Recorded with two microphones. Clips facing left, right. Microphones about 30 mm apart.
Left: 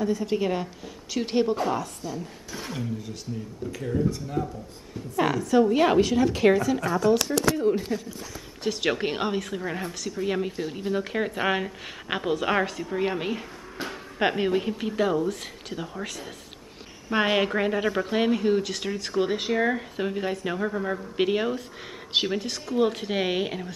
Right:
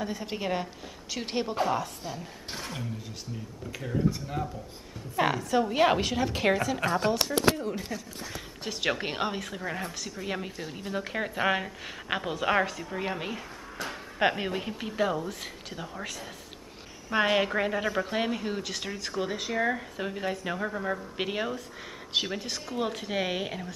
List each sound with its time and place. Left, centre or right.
0.0 s a woman's voice: centre
1.1 s a woman's voice: centre
1.5 s a woman's voice: centre
2.6 s a woman's voice: centre
6.8 s speech: right
7.9 s a woman's voice: centre
19.1 s speech: left
19.6 s speech: centre
22.4 s speech: centre